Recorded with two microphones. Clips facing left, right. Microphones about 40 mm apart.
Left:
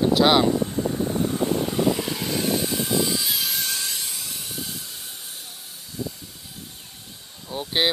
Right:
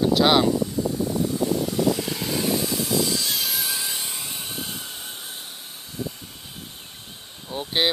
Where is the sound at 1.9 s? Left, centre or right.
Centre.